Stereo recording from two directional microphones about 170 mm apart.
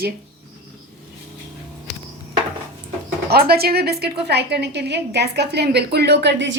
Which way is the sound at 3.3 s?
65° right (ahead or behind).